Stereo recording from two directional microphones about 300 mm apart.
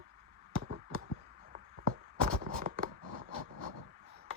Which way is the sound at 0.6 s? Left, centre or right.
Right.